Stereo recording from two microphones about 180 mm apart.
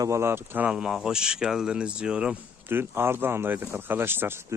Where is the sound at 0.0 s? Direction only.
15° right (ahead or behind).